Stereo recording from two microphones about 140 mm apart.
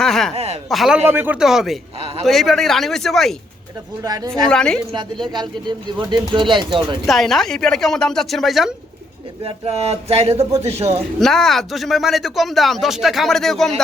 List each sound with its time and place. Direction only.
0.0 s speech: 5° left (ahead or behind)
0.3 s a sound: 45° right (ahead or behind)
0.7 s speech: centre (ahead or behind)
1.0 s speech: 15° right (ahead or behind)
2.0 s a sound: 45° right (ahead or behind)
2.2 s speech: centre (ahead or behind)
4.0 s speech: 25° right (ahead or behind)
4.4 s speech: 5° left (ahead or behind)
5.3 s speech: 30° right (ahead or behind)
7.1 s speech: centre (ahead or behind)
9.4 s speech: 45° right (ahead or behind)
11.2 s speech: centre (ahead or behind)